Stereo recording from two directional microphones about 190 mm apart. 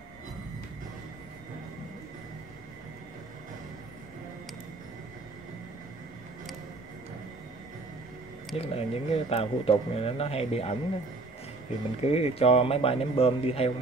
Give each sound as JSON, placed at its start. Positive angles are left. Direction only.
{"t": 8.5, "sound": "speech", "side_deg": 30}
{"t": 12.0, "sound": "speech", "side_deg": 35}